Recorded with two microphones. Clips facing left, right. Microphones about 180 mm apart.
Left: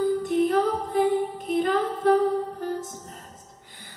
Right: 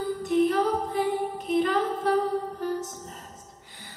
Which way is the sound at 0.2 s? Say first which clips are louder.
Left 1 dB; 50° left (ahead or behind).